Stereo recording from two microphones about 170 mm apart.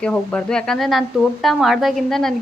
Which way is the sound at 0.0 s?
5° left (ahead or behind).